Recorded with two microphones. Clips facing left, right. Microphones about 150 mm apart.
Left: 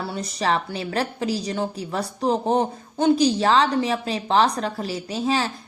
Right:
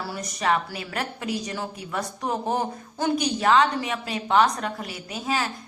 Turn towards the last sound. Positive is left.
turn(degrees=30)  # may be behind; listen again after turning